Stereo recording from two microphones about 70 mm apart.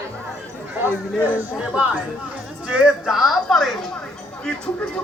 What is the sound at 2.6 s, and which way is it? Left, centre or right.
Speech, centre.